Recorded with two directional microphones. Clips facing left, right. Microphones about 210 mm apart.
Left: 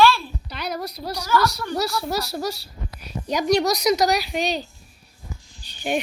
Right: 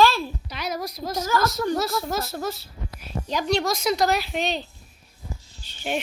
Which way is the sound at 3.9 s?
Centre (ahead or behind).